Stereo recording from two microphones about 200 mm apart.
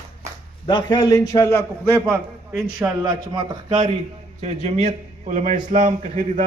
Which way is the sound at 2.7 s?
20° right (ahead or behind).